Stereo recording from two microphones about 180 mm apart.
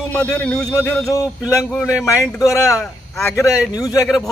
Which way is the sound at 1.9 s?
5° right (ahead or behind).